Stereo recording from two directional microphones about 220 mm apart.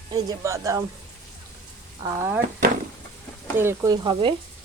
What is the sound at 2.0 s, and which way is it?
Speech, 10° right (ahead or behind).